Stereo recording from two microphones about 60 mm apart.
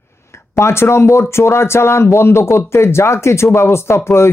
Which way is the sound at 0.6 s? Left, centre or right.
Left.